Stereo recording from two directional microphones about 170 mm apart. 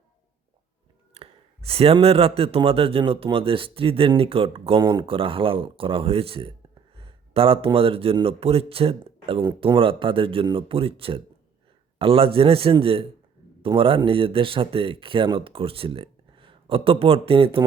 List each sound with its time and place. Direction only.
1.1 s speech: 35° right (ahead or behind)